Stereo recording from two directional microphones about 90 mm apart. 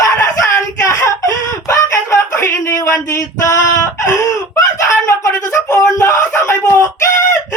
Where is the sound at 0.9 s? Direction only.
35° left (ahead or behind).